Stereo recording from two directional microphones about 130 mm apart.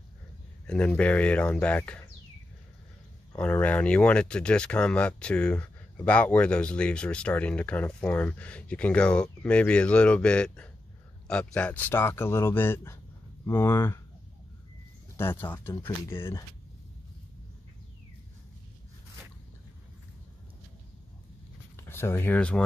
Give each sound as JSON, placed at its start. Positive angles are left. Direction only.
{"t": 0.7, "sound": "speech", "side_deg": 10}
{"t": 3.3, "sound": "speech", "side_deg": 10}
{"t": 15.1, "sound": "speech", "side_deg": 15}
{"t": 21.7, "sound": "speech", "side_deg": 20}